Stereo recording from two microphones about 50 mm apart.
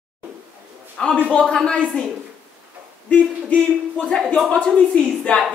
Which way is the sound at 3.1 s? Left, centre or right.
Left.